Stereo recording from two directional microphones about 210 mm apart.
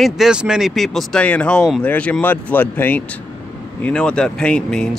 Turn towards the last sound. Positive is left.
turn(degrees=5)  # may be behind; listen again after turning